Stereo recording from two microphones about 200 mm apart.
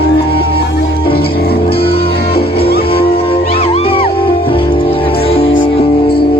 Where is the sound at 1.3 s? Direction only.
50° left (ahead or behind).